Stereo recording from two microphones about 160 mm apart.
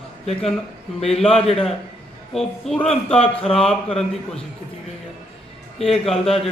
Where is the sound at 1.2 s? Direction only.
40° left (ahead or behind).